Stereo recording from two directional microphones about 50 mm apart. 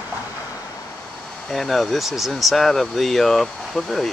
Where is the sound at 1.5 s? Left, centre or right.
Centre.